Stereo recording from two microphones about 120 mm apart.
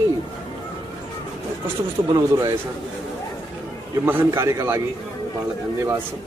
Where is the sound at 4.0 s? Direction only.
20° right (ahead or behind).